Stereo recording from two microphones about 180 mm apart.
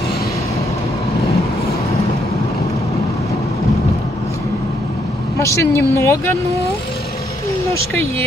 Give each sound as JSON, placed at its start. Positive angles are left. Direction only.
{"t": 5.4, "sound": "speech", "side_deg": 15}
{"t": 7.7, "sound": "speech", "side_deg": 15}